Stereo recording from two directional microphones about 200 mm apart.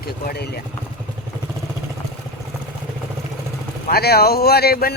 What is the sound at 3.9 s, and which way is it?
Speech, 50° left (ahead or behind).